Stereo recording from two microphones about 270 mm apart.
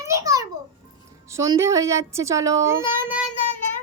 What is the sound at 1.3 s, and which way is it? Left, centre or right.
A child's voice, centre.